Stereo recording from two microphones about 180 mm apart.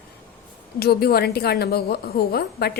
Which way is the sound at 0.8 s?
60° left (ahead or behind).